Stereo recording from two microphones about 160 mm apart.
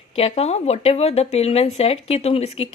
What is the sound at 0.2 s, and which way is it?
A woman's voice, 40° left (ahead or behind).